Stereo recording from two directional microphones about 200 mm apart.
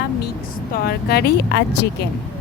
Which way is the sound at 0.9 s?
55° left (ahead or behind).